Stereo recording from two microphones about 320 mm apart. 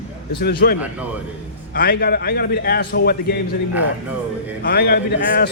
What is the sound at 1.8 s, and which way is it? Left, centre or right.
A man's voice, left.